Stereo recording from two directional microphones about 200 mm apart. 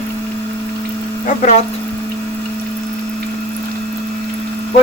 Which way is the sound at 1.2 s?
40° left (ahead or behind).